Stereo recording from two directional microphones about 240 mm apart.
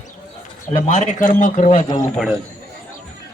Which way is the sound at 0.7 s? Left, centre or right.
Left.